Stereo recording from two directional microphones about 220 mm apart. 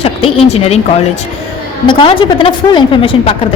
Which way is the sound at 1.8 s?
20° left (ahead or behind).